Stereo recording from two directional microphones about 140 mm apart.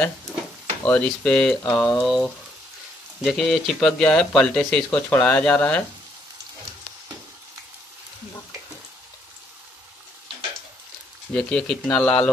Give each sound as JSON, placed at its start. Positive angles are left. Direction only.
{"t": 0.8, "sound": "speech", "side_deg": 10}
{"t": 11.3, "sound": "speech", "side_deg": 5}